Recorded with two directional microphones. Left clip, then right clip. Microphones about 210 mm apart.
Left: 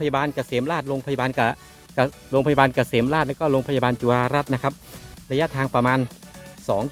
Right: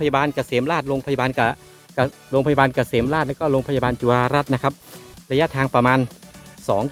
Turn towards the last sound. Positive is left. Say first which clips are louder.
# right 3 dB
turn(degrees=-15)  # may be behind; listen again after turning